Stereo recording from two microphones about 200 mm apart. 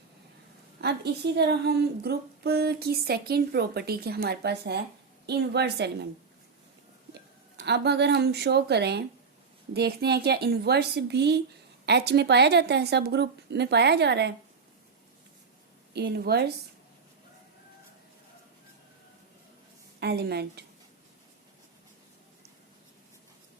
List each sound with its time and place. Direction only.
0.8 s a woman's voice: 55° right (ahead or behind)
7.6 s a woman's voice: 60° right (ahead or behind)
15.9 s a woman's voice: 55° right (ahead or behind)
20.0 s a woman's voice: 55° right (ahead or behind)